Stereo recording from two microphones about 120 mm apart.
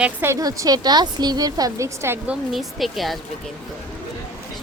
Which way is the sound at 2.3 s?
Centre (ahead or behind).